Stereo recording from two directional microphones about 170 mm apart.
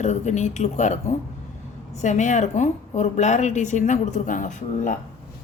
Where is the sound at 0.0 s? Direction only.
45° left (ahead or behind).